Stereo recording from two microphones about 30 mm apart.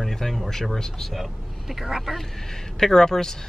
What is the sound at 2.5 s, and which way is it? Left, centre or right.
Speech, centre.